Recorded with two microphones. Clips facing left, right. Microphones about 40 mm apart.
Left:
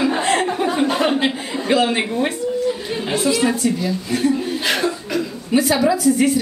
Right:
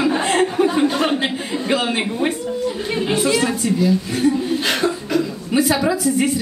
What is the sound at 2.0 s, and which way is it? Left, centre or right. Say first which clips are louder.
Speech: even; centre.